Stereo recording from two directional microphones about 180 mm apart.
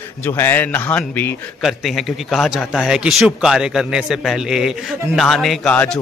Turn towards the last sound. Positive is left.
turn(degrees=5)  # may be behind; listen again after turning